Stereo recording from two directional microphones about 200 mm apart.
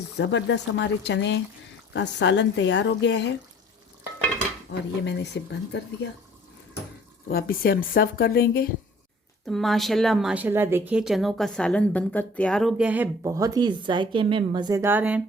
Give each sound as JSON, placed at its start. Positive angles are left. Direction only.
{"t": 0.2, "sound": "speech", "side_deg": 60}
{"t": 5.0, "sound": "speech", "side_deg": 60}
{"t": 7.3, "sound": "speech", "side_deg": 50}
{"t": 9.5, "sound": "a woman's voice", "side_deg": 0}